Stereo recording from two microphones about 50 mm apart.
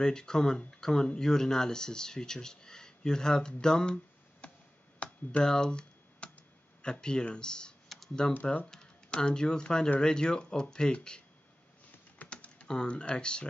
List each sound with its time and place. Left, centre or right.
0.0 s speech: centre
3.6 s a sound: centre
5.0 s computer keyboard: left
5.4 s computer keyboard: centre
6.8 s speech: centre
12.3 s typing: left
12.6 s speech: centre